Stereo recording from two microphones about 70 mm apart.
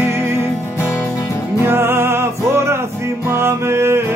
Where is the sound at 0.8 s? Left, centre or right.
Left.